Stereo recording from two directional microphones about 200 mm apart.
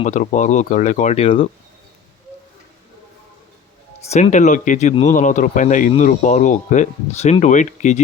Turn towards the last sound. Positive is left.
turn(degrees=35)  # may be behind; listen again after turning